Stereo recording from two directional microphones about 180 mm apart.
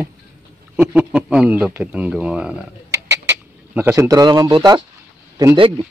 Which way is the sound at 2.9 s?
10° right (ahead or behind).